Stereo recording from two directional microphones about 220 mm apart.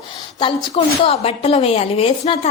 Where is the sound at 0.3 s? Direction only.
25° left (ahead or behind).